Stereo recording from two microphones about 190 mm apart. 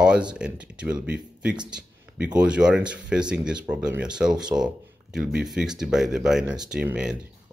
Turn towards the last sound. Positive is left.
turn(degrees=-5)  # may be behind; listen again after turning